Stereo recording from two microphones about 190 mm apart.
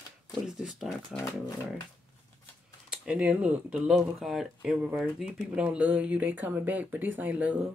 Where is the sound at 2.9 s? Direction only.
5° right (ahead or behind).